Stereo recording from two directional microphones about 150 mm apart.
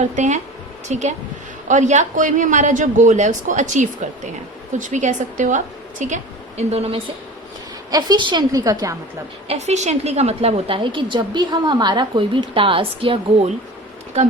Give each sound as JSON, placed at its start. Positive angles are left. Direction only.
{"t": 0.2, "sound": "a woman's voice", "side_deg": -50}
{"t": 6.6, "sound": "a woman's voice", "side_deg": -45}
{"t": 7.9, "sound": "a woman's voice", "side_deg": -25}
{"t": 9.5, "sound": "a woman's voice", "side_deg": -45}